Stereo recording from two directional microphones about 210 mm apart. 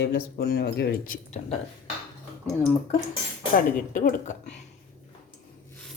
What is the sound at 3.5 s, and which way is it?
A woman's voice, 40° left (ahead or behind).